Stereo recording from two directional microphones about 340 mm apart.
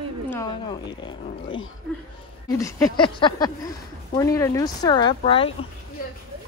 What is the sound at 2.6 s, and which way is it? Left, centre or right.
Speech, centre.